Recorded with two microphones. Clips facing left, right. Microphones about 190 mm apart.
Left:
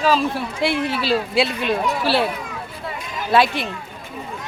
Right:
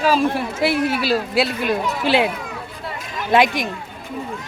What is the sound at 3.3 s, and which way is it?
Speech, 15° right (ahead or behind).